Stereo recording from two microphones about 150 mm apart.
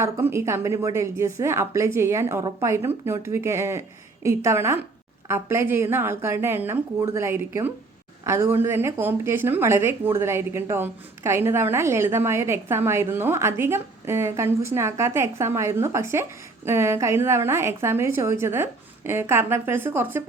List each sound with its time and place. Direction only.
0.0 s a woman's voice: 15° right (ahead or behind)